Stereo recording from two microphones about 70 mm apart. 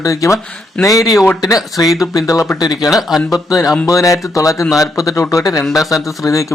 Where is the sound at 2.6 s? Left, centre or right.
Left.